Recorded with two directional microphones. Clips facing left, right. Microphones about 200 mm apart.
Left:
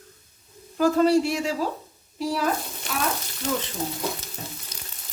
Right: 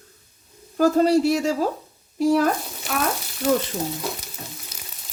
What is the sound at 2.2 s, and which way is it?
Speech, 50° right (ahead or behind).